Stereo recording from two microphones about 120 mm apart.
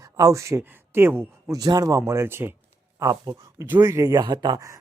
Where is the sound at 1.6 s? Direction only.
30° right (ahead or behind).